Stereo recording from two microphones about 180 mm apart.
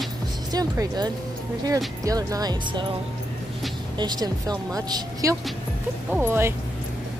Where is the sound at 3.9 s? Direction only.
20° right (ahead or behind).